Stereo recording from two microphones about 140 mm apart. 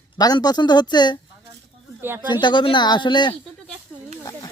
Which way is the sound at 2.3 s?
35° left (ahead or behind).